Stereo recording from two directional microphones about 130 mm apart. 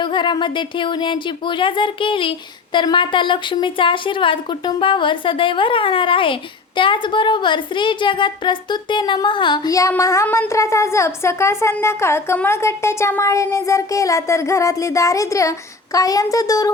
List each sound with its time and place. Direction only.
0.0 s a woman's voice: 35° left (ahead or behind)